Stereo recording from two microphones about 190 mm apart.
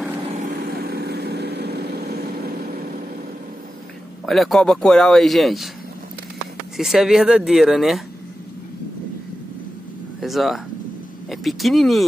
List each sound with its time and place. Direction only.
0.7 s vehicle: 55° right (ahead or behind)
4.3 s a man's voice: centre (ahead or behind)
6.8 s a man's voice: centre (ahead or behind)
10.2 s a man's voice: centre (ahead or behind)